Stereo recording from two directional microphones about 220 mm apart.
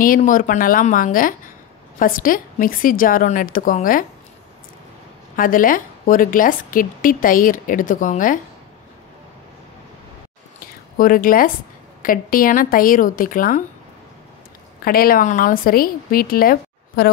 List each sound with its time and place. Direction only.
0.0 s a woman's voice: 40° left (ahead or behind)
5.3 s a woman's voice: 40° left (ahead or behind)
10.6 s a sound: 40° left (ahead or behind)
12.0 s a woman's voice: 40° left (ahead or behind)
14.9 s a woman's voice: 40° left (ahead or behind)